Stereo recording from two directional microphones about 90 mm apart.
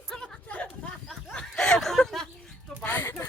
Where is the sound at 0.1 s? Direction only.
10° left (ahead or behind).